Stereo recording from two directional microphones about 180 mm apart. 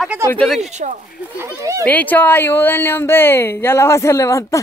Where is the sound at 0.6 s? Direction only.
40° right (ahead or behind).